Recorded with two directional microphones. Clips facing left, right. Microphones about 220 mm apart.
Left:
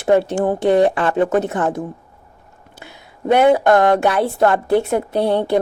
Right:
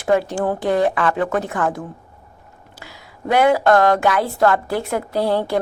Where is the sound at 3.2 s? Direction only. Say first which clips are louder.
Left 2 dB; 25° left (ahead or behind).